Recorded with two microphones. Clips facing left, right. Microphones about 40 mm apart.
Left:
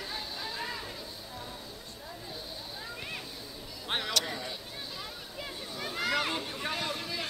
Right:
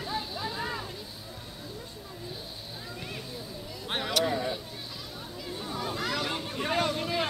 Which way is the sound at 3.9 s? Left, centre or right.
Centre.